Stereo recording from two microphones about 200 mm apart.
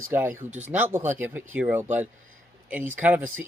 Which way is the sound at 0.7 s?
10° right (ahead or behind).